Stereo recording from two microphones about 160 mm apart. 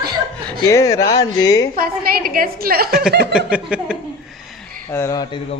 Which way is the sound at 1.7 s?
65° right (ahead or behind).